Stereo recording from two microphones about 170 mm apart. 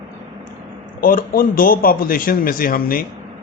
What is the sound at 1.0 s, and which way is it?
Speech, 55° left (ahead or behind).